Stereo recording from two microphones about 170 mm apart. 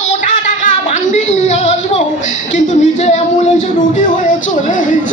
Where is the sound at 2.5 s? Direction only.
45° left (ahead or behind).